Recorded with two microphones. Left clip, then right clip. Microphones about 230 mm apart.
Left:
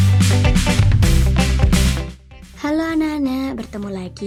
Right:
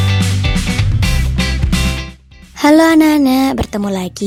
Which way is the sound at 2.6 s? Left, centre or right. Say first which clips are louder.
Right 11 dB; right.